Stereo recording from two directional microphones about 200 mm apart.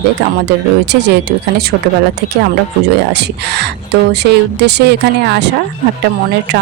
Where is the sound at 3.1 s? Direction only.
55° right (ahead or behind).